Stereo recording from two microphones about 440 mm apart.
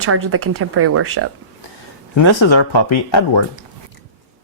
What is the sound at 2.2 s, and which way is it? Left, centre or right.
Speech, left.